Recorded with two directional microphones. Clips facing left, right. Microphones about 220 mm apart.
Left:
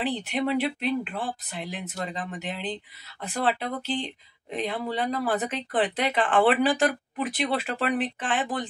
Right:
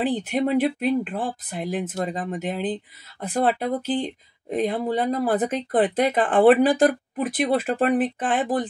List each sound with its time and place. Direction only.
0.0 s speech: 55° right (ahead or behind)